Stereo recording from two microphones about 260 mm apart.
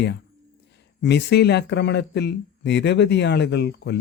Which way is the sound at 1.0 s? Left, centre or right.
Left.